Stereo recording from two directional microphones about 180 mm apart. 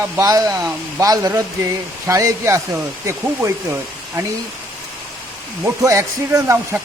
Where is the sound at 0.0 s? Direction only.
20° right (ahead or behind).